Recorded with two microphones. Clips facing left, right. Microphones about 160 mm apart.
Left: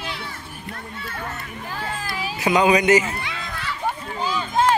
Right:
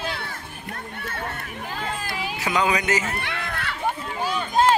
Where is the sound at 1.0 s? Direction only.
60° right (ahead or behind).